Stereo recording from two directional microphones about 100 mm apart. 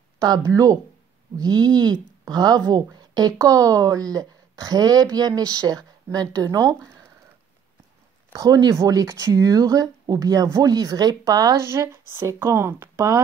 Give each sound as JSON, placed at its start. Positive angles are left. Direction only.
{"t": 0.2, "sound": "speech", "side_deg": -35}
{"t": 8.3, "sound": "speech", "side_deg": -40}
{"t": 11.6, "sound": "speech", "side_deg": -25}